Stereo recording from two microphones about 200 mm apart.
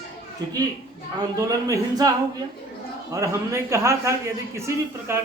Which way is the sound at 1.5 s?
15° right (ahead or behind).